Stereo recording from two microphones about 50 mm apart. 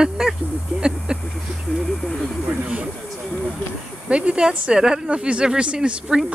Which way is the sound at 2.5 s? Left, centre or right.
Right.